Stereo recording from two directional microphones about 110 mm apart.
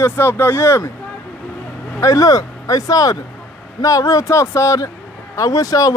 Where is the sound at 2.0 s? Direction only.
35° left (ahead or behind).